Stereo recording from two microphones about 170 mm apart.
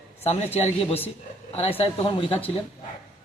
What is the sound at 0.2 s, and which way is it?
Speech, 40° left (ahead or behind).